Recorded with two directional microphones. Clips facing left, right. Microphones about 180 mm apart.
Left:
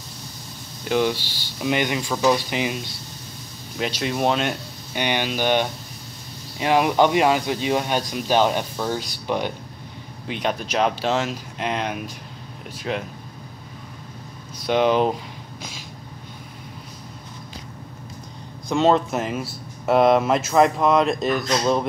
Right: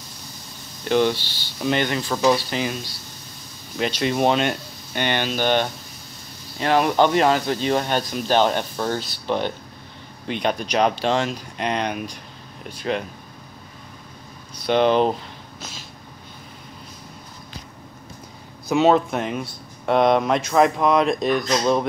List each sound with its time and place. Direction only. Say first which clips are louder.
0.8 s speech: right 2 dB; 5° left (ahead or behind)
3.7 s speech: right 3 dB; centre (ahead or behind)
14.7 s speech: right 1 dB; 5° left (ahead or behind)
18.7 s speech: right 1 dB; centre (ahead or behind)